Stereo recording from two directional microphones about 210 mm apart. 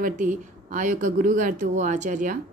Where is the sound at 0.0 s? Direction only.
40° right (ahead or behind).